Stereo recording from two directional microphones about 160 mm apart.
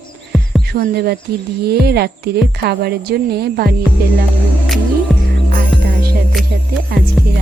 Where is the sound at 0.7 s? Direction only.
75° right (ahead or behind).